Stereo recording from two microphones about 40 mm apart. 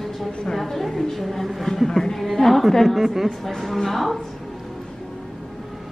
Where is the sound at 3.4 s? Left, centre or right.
Centre.